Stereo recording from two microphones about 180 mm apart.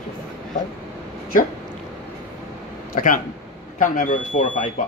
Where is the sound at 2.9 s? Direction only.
50° left (ahead or behind).